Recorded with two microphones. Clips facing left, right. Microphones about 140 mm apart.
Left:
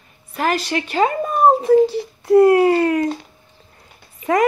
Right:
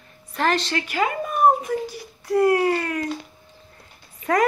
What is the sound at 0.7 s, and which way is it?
Speech, 30° left (ahead or behind).